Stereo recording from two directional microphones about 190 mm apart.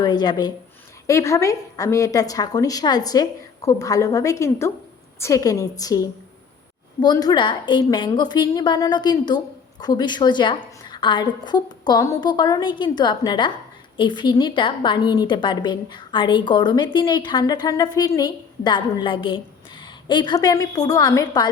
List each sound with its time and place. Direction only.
0.0 s a woman's voice: 20° left (ahead or behind)